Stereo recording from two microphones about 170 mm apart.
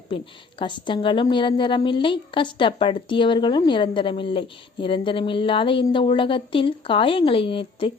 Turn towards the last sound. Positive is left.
turn(degrees=30)  # may be behind; listen again after turning